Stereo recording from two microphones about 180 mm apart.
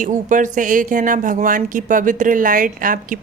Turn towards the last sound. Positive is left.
turn(degrees=-50)  # may be behind; listen again after turning